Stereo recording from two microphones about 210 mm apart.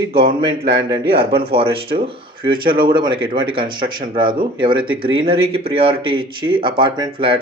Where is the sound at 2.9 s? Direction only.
20° right (ahead or behind).